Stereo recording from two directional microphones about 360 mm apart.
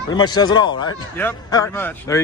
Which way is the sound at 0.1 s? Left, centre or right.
Centre.